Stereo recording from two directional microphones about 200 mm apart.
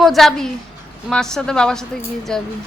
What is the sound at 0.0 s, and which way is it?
A woman's voice, centre (ahead or behind).